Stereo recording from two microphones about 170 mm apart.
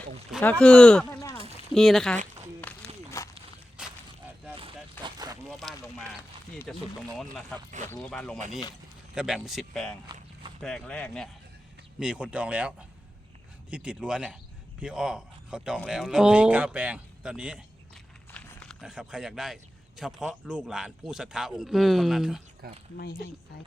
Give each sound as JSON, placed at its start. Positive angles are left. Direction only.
{"t": 0.6, "sound": "a man's voice", "side_deg": 5}
{"t": 2.7, "sound": "run", "side_deg": 10}
{"t": 3.2, "sound": "walk", "side_deg": 20}
{"t": 3.8, "sound": "a sound", "side_deg": -5}
{"t": 4.5, "sound": "a sound", "side_deg": -30}
{"t": 5.5, "sound": "a sound", "side_deg": 0}
{"t": 6.7, "sound": "a man's voice", "side_deg": 0}
{"t": 7.9, "sound": "a man's voice", "side_deg": 5}
{"t": 10.1, "sound": "speech", "side_deg": -25}
{"t": 10.6, "sound": "a man's voice", "side_deg": 5}
{"t": 11.9, "sound": "speech", "side_deg": -5}
{"t": 18.3, "sound": "a sound", "side_deg": 5}
{"t": 20.0, "sound": "a man's voice", "side_deg": 0}
{"t": 22.6, "sound": "speech", "side_deg": -65}